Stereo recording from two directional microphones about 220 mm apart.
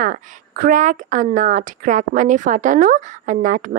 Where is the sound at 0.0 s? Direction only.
40° right (ahead or behind).